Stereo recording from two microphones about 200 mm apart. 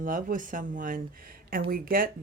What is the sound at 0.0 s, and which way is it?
Speech, 45° right (ahead or behind).